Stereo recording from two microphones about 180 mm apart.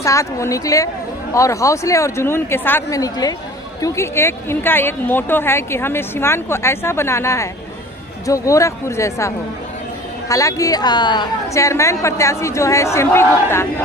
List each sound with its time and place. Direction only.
0.0 s speech: 15° left (ahead or behind)